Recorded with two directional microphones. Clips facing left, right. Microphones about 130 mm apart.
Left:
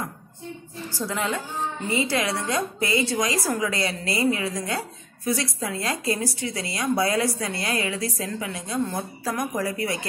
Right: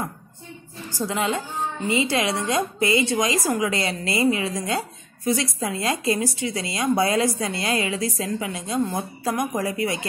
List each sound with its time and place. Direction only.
0.9 s a woman's voice: 20° right (ahead or behind)